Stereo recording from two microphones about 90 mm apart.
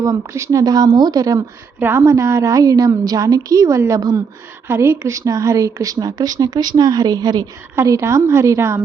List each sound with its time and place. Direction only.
0.0 s speech: 35° right (ahead or behind)
1.8 s speech: 25° right (ahead or behind)
4.7 s speech: 30° right (ahead or behind); by 7.4 s 50° right (ahead or behind)
7.8 s speech: 35° right (ahead or behind)